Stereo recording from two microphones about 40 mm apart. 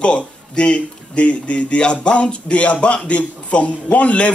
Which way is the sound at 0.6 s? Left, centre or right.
Left.